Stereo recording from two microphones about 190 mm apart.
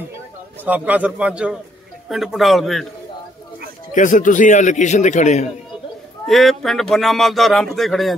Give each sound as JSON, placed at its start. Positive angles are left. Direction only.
{"t": 0.7, "sound": "a man's voice", "side_deg": -10}
{"t": 3.9, "sound": "a man's voice", "side_deg": 45}
{"t": 6.2, "sound": "speech", "side_deg": 0}